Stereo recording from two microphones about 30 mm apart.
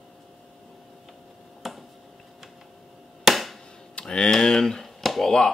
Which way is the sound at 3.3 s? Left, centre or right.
Centre.